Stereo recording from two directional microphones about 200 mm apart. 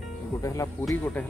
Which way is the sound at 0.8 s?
5° left (ahead or behind).